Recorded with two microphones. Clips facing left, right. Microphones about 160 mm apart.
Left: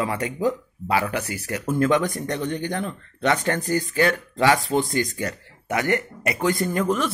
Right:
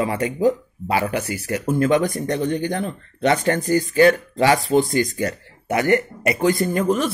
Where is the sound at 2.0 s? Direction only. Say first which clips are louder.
Right 4 dB; 40° right (ahead or behind).